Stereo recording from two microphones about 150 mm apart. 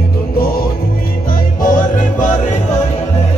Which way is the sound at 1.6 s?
60° left (ahead or behind).